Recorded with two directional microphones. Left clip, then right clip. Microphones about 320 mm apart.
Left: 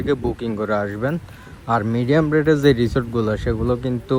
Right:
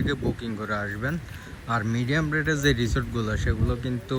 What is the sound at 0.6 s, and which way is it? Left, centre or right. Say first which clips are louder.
Speech: left 9 dB; left.